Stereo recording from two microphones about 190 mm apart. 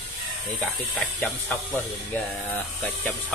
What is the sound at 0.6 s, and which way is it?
Speech, 10° left (ahead or behind).